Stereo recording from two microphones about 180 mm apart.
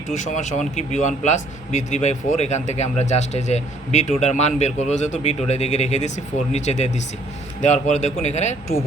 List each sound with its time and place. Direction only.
0.3 s a man's voice: 45° left (ahead or behind)